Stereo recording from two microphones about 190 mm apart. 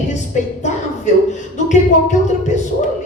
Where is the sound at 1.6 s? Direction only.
40° left (ahead or behind).